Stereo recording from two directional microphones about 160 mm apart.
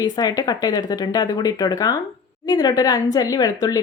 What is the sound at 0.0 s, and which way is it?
Speech, 25° left (ahead or behind).